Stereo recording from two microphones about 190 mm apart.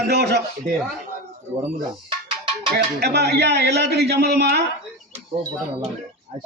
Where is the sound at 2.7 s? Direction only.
60° right (ahead or behind).